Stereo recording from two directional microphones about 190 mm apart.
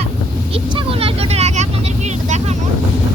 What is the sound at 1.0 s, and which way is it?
Vehicle, 35° right (ahead or behind).